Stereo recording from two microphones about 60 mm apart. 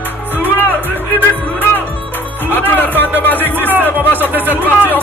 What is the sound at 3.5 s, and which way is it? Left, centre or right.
Music, right.